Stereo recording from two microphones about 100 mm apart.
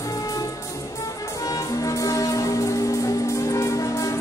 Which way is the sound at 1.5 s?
35° left (ahead or behind).